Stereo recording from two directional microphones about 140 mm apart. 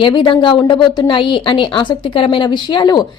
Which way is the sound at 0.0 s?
35° left (ahead or behind).